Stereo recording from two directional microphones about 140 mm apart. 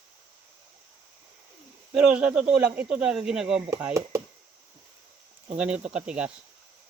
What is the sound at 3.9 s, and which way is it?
Speech, 20° right (ahead or behind).